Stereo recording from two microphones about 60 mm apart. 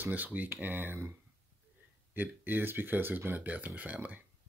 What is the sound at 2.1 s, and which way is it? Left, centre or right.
Speech, right.